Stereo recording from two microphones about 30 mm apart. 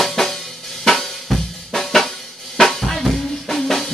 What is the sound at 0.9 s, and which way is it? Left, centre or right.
Drum kit, centre.